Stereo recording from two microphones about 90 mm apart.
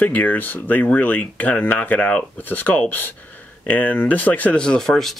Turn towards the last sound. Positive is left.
turn(degrees=5)  # may be behind; listen again after turning